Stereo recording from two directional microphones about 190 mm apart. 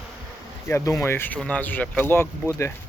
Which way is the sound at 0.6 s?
15° left (ahead or behind).